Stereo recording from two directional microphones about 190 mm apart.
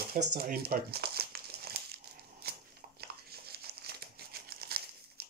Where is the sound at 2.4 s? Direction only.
55° right (ahead or behind).